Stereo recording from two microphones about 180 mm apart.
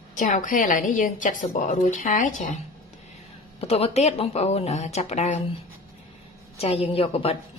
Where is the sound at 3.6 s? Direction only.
35° left (ahead or behind).